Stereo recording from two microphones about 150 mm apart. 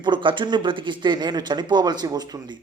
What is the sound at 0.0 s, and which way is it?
A man's voice, 35° right (ahead or behind).